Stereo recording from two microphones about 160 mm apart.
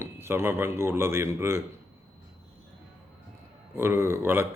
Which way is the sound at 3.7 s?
15° right (ahead or behind).